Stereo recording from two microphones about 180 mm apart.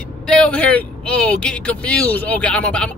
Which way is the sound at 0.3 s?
5° left (ahead or behind).